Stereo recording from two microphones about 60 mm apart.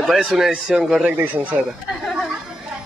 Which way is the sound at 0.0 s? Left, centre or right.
Centre.